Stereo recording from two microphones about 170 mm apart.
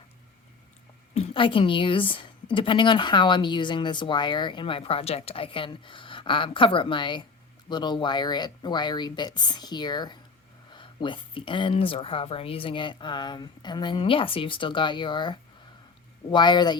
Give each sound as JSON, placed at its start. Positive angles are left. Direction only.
{"t": 1.1, "sound": "a woman's voice", "side_deg": 35}